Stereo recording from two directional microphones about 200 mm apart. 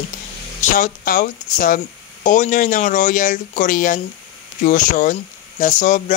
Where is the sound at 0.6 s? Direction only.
40° left (ahead or behind).